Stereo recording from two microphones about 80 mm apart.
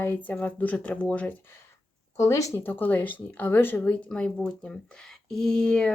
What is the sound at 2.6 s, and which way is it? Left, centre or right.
Speech, left.